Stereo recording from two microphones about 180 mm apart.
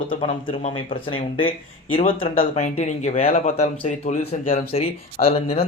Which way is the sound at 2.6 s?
40° left (ahead or behind).